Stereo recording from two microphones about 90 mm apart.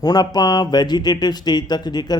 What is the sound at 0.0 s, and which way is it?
Speech, 50° left (ahead or behind).